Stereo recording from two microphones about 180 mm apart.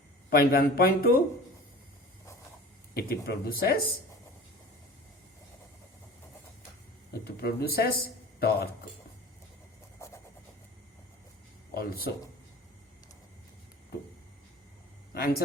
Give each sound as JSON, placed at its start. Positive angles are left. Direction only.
{"t": 0.3, "sound": "speech", "side_deg": 55}
{"t": 2.9, "sound": "speech", "side_deg": 60}
{"t": 7.1, "sound": "speech", "side_deg": 60}
{"t": 10.0, "sound": "vehicle", "side_deg": 15}
{"t": 11.7, "sound": "speech", "side_deg": 55}
{"t": 15.1, "sound": "speech", "side_deg": 55}